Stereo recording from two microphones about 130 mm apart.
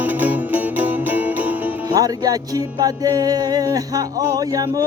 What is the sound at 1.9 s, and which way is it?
Music, 30° right (ahead or behind).